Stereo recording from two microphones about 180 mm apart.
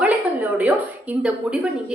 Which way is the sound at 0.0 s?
10° right (ahead or behind).